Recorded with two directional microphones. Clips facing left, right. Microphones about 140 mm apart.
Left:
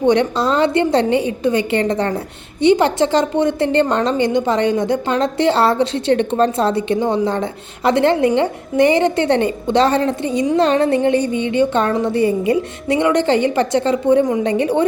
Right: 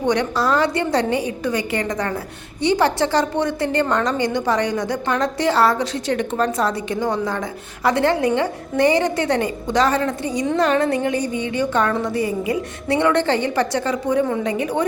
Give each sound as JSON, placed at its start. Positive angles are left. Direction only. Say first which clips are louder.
{"t": 0.0, "sound": "a woman's voice", "louder": "left 5 dB", "side_deg": 25}